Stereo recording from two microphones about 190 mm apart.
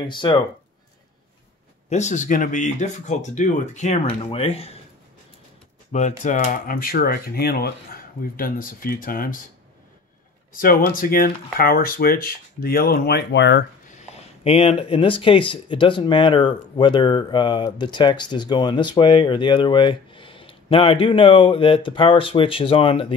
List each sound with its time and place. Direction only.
0.1 s speech: 25° left (ahead or behind)
1.9 s speech: 40° left (ahead or behind)
5.9 s speech: 40° left (ahead or behind)
10.5 s speech: 50° left (ahead or behind); by 13.7 s 65° left (ahead or behind)
13.8 s speech: 35° left (ahead or behind)